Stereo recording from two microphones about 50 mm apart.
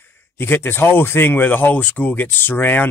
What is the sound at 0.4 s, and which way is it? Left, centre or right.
Speech, left.